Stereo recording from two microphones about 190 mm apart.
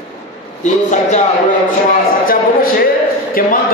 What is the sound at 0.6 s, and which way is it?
Speech, 40° left (ahead or behind).